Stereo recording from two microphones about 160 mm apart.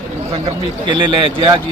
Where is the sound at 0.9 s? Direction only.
30° right (ahead or behind).